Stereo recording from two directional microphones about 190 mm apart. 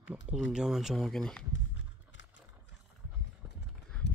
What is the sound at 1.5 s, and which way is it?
Horse, 75° left (ahead or behind).